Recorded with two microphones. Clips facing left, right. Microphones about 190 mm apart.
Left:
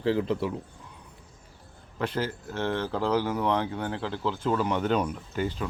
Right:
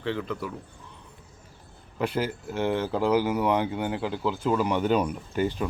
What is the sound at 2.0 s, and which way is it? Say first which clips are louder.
Speech: right 2 dB; 10° right (ahead or behind).